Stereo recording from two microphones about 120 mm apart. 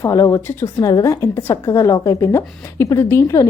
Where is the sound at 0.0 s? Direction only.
25° left (ahead or behind).